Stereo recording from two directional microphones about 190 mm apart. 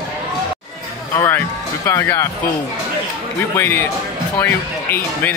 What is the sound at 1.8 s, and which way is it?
Speech, 15° left (ahead or behind).